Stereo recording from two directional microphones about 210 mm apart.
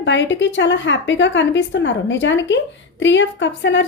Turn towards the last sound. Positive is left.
turn(degrees=60)  # may be behind; listen again after turning